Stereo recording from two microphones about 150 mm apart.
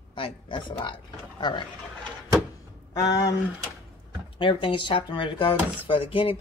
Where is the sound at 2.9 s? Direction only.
25° left (ahead or behind).